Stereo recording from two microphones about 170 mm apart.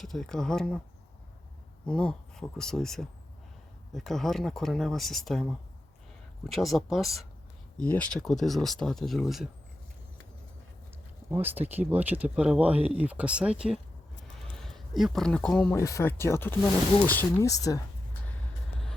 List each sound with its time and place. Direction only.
0.0 s speech: centre (ahead or behind)
1.9 s speech: 5° left (ahead or behind)
11.3 s speech: 10° right (ahead or behind)
14.3 s a sound: 5° left (ahead or behind)
15.8 s speech: 15° left (ahead or behind)